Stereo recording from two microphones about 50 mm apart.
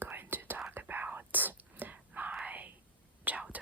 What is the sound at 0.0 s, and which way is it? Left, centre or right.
Whispering, right.